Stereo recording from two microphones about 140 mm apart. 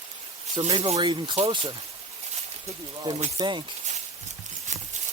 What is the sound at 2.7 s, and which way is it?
Speech, 25° right (ahead or behind).